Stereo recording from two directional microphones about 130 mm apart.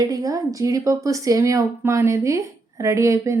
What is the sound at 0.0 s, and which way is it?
Speech, 25° right (ahead or behind).